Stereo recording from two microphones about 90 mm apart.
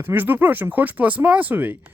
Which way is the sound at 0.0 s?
20° right (ahead or behind).